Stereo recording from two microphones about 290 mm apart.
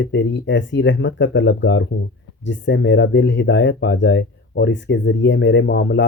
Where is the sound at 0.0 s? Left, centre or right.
Left.